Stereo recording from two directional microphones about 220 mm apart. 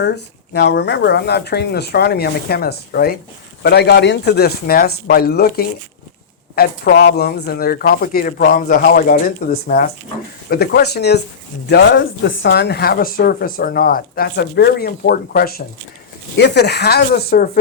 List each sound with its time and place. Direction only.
0.5 s speech: 50° left (ahead or behind)